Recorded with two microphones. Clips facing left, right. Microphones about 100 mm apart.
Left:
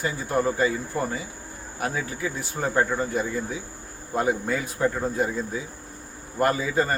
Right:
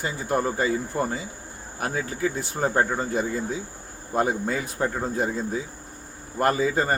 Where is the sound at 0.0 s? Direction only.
20° right (ahead or behind).